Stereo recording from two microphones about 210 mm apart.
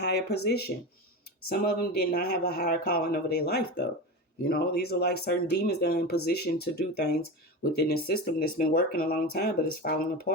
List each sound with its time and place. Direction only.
0.0 s speech: 50° left (ahead or behind)
1.5 s speech: 45° left (ahead or behind)